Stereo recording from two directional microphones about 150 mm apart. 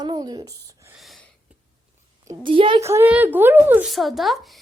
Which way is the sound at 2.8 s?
15° right (ahead or behind).